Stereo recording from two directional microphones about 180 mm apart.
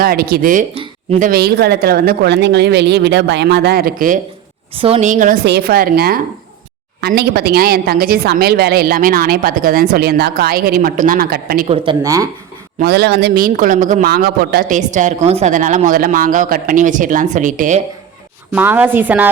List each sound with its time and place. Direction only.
0.0 s a woman's voice: 55° right (ahead or behind)
4.8 s a man's voice: 35° right (ahead or behind); by 11.6 s 55° right (ahead or behind)
11.9 s speech: 20° right (ahead or behind)
12.8 s a man's voice: 65° right (ahead or behind); by 17.7 s 45° right (ahead or behind)
18.5 s a woman's voice: 10° right (ahead or behind)